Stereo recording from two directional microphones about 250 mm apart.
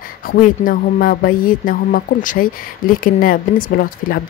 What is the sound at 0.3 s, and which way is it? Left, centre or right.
Speech, left.